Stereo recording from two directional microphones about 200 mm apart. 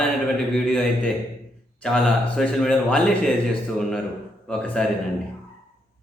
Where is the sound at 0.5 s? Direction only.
5° left (ahead or behind).